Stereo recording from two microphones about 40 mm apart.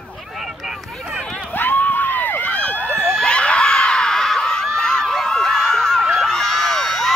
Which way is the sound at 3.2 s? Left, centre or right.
Left.